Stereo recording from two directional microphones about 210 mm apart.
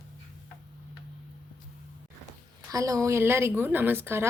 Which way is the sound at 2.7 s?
15° right (ahead or behind).